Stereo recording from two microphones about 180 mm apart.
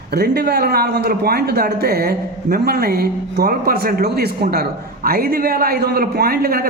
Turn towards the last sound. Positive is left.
turn(degrees=-55)  # may be behind; listen again after turning